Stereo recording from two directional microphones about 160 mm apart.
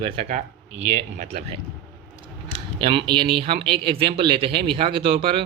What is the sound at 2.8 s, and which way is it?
Speech, 35° right (ahead or behind).